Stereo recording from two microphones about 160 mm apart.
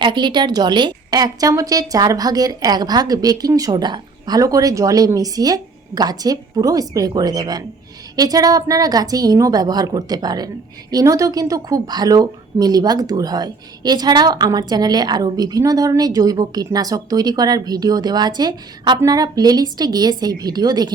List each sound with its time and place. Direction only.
0.0 s a woman's voice: 30° right (ahead or behind)